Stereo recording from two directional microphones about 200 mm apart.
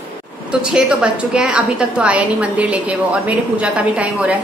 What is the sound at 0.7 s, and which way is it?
A woman's voice, 5° right (ahead or behind).